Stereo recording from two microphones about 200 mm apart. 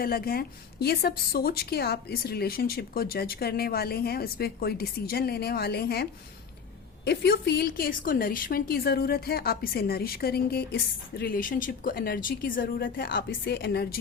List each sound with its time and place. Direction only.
0.0 s a woman's voice: 50° left (ahead or behind)